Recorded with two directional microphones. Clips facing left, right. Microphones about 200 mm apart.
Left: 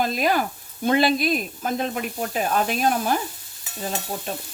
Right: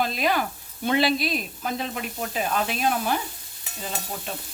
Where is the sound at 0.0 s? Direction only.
45° left (ahead or behind).